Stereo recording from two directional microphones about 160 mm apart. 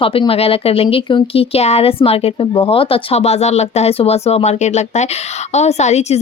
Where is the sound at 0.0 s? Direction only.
35° left (ahead or behind).